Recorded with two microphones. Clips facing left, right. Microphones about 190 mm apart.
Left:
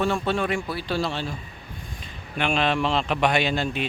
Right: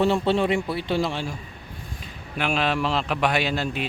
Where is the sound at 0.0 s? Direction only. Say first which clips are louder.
Right 3 dB; 25° right (ahead or behind).